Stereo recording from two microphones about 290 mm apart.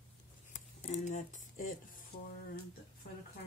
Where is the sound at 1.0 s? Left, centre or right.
Left.